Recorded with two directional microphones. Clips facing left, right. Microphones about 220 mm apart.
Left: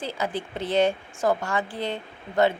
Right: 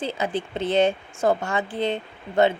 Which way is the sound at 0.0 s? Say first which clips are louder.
Right 3 dB; 25° right (ahead or behind).